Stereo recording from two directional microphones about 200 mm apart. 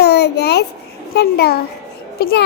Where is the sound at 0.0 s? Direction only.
55° left (ahead or behind).